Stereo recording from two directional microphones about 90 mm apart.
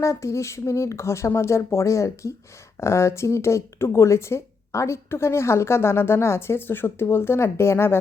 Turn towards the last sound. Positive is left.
turn(degrees=25)  # may be behind; listen again after turning